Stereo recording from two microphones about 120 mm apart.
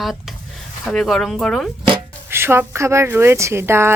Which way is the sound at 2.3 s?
20° right (ahead or behind).